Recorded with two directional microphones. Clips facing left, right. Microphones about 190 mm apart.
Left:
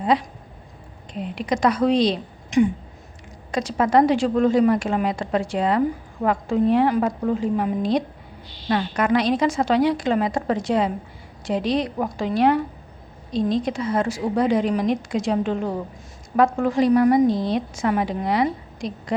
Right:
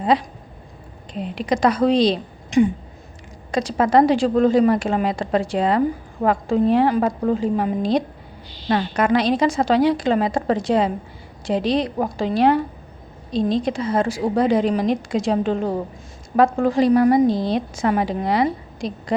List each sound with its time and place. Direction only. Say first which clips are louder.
1.2 s a woman's voice: right 2 dB; 30° right (ahead or behind)